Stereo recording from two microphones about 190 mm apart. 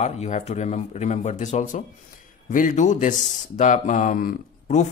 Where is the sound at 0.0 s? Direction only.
35° left (ahead or behind).